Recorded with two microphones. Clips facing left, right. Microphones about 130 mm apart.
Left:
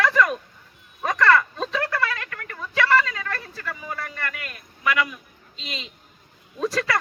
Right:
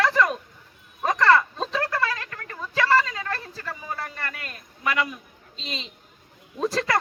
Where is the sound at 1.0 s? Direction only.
25° right (ahead or behind).